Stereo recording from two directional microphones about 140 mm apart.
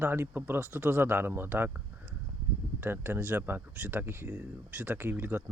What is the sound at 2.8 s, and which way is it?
Speech, 15° right (ahead or behind).